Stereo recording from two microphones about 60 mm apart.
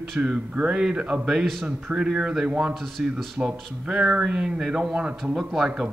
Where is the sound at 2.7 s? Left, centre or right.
Centre.